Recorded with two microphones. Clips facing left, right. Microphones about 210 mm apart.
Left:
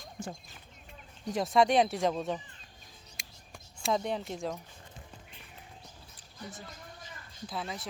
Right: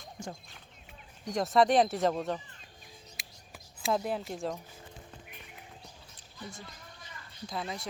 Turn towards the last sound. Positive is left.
turn(degrees=0)  # may be behind; listen again after turning